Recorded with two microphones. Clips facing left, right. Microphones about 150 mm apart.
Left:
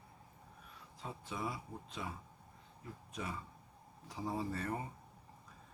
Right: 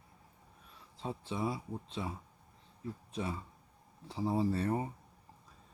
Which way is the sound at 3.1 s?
30° right (ahead or behind).